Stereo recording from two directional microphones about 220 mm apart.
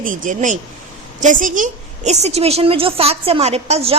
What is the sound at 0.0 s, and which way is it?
A woman's voice, 35° right (ahead or behind).